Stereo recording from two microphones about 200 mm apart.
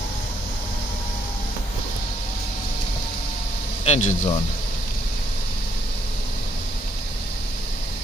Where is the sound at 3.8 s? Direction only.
35° left (ahead or behind).